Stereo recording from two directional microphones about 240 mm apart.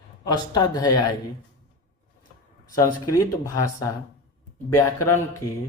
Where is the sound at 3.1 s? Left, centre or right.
Centre.